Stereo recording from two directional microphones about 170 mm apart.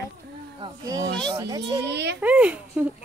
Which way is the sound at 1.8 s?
80° right.